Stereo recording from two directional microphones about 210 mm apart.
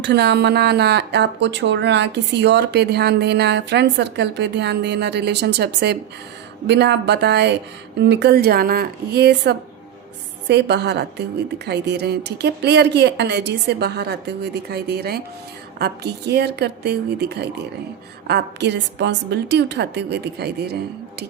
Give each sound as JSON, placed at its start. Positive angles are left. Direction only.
{"t": 0.0, "sound": "a woman's voice", "side_deg": -55}